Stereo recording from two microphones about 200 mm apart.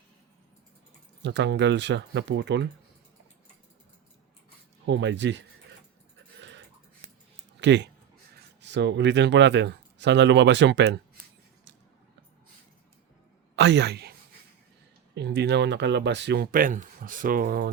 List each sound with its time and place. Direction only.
1.2 s speech: 60° right (ahead or behind)
4.9 s speech: 60° right (ahead or behind)
7.6 s speech: 60° right (ahead or behind)
13.6 s speech: 60° right (ahead or behind)